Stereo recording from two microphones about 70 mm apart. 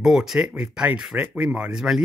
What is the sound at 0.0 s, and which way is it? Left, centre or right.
Speech, centre.